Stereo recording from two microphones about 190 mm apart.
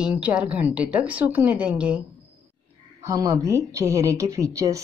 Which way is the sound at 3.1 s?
20° right (ahead or behind).